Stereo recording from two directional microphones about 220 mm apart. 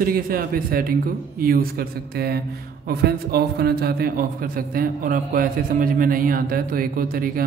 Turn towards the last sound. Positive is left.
turn(degrees=-40)  # may be behind; listen again after turning